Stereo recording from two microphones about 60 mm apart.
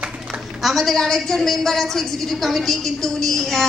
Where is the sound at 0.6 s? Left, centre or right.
Centre.